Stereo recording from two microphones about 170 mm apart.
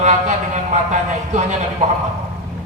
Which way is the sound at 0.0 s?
40° right (ahead or behind).